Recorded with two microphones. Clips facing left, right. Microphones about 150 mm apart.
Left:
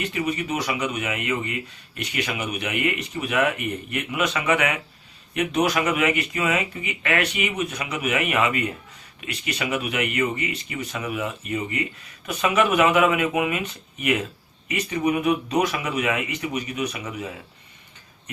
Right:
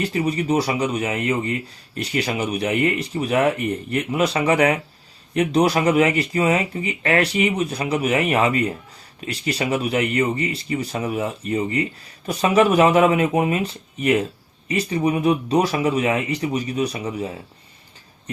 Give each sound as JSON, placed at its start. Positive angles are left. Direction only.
{"t": 0.0, "sound": "speech", "side_deg": -35}